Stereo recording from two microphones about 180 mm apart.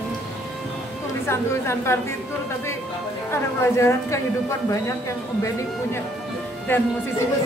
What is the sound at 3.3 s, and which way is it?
Speech, 15° left (ahead or behind).